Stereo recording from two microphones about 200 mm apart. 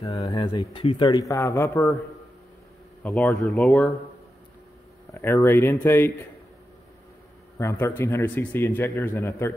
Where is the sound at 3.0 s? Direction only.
Centre (ahead or behind).